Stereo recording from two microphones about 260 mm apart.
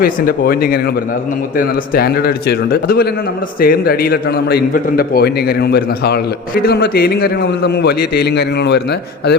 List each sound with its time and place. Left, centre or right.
0.0 s a man's voice: left